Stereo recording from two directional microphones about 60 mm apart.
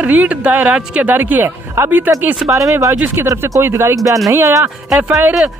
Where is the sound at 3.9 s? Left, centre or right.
Right.